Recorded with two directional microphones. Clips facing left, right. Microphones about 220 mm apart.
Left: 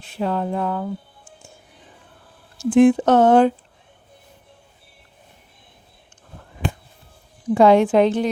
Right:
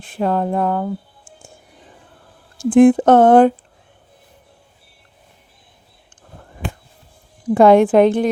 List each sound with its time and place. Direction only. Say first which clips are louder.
0.0 s speech: right 4 dB; 50° right (ahead or behind)
2.6 s speech: right 3 dB; 55° right (ahead or behind)
7.5 s speech: right 3 dB; 55° right (ahead or behind)